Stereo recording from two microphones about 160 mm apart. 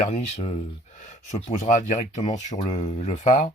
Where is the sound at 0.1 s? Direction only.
45° left (ahead or behind).